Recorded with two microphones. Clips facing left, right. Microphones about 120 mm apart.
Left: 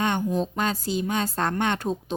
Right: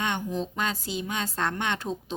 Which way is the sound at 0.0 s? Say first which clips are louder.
Left 5 dB; 45° left (ahead or behind).